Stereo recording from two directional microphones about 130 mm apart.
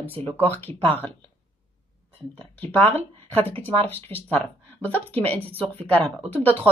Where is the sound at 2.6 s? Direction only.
15° left (ahead or behind).